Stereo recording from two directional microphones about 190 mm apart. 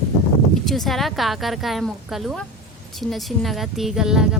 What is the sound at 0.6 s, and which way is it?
Speech, centre (ahead or behind).